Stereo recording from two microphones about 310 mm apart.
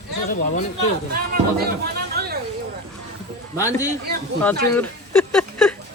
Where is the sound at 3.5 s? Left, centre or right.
Centre.